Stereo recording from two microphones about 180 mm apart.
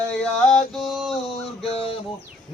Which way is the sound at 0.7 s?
Centre (ahead or behind).